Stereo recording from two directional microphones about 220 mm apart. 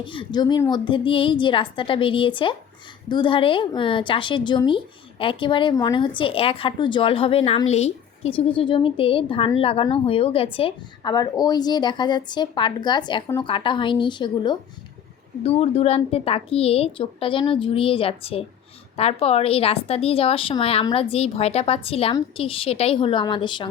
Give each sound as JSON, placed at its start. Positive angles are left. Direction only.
{"t": 0.0, "sound": "a woman's voice", "side_deg": 20}